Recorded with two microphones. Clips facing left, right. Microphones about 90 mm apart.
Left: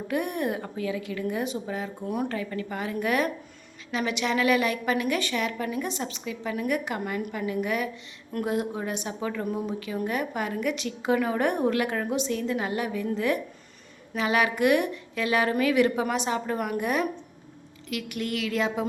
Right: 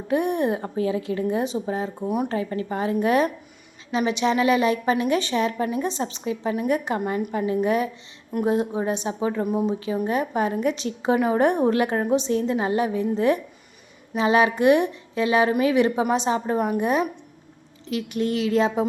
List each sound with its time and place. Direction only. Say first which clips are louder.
0.1 s a woman's voice: right 6 dB; 25° right (ahead or behind)